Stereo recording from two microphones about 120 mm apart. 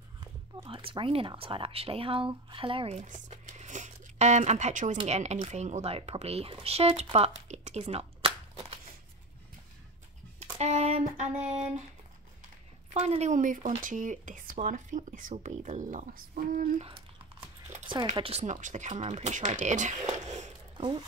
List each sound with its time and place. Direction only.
0.7 s speech: 45° right (ahead or behind)
3.1 s speech: 85° right
5.0 s a sound: 65° right (ahead or behind)
5.5 s speech: 70° right (ahead or behind); by 8.3 s 55° right (ahead or behind)
10.6 s a sound: 70° right (ahead or behind)
12.9 s speech: 60° right (ahead or behind); by 16.1 s 85° right
16.7 s speech: 55° right (ahead or behind)
18.1 s speech: 50° right (ahead or behind)
18.4 s speech: 90° right
20.7 s speech: 40° right (ahead or behind)